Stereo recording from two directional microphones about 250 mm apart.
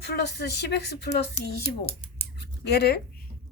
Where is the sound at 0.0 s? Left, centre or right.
Left.